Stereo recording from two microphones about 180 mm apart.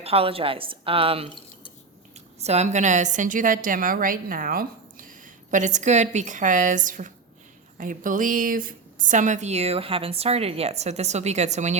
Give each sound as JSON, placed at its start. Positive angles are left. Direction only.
{"t": 0.0, "sound": "a woman's voice", "side_deg": -35}
{"t": 2.4, "sound": "a woman's voice", "side_deg": -35}